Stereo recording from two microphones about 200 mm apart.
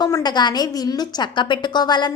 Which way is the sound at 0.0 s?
20° left (ahead or behind).